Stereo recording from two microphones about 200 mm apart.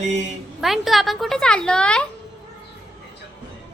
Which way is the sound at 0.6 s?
Centre (ahead or behind).